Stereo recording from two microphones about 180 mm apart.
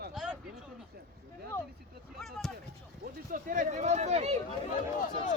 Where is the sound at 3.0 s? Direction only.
50° right (ahead or behind).